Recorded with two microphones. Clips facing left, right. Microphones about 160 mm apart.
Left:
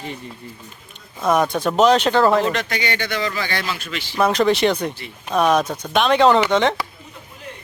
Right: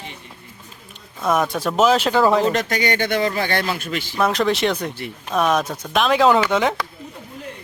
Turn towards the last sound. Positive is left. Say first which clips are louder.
# left 1 dB
turn(degrees=-5)  # may be behind; listen again after turning